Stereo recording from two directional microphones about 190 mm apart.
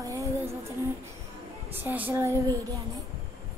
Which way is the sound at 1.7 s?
10° right (ahead or behind).